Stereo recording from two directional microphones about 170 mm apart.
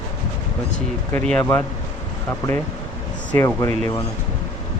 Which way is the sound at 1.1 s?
5° left (ahead or behind).